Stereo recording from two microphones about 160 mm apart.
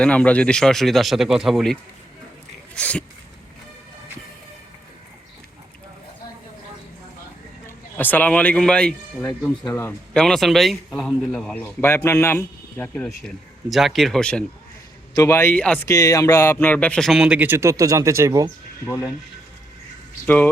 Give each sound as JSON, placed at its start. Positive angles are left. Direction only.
{"t": 0.0, "sound": "a man's voice", "side_deg": 5}
{"t": 7.9, "sound": "speech", "side_deg": 10}
{"t": 10.2, "sound": "speech", "side_deg": 5}
{"t": 13.2, "sound": "a man's voice", "side_deg": 0}
{"t": 15.1, "sound": "speech", "side_deg": 20}
{"t": 15.9, "sound": "a man's voice", "side_deg": 20}
{"t": 20.2, "sound": "speech", "side_deg": 10}